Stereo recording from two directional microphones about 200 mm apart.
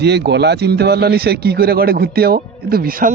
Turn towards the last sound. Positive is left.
turn(degrees=-45)  # may be behind; listen again after turning